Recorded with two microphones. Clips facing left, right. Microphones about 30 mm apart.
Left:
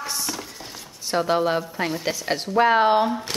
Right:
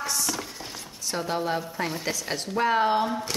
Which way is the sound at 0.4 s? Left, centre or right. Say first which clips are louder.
Even; centre.